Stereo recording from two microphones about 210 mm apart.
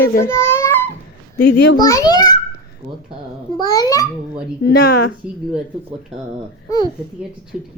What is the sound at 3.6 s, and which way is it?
Speech, 20° left (ahead or behind).